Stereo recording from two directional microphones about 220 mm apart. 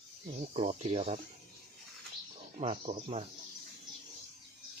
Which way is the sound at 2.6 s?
25° right (ahead or behind).